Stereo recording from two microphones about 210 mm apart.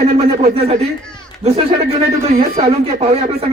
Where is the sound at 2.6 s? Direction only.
30° right (ahead or behind).